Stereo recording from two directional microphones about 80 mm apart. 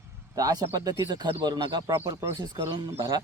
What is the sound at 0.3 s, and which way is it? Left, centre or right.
Speech, right.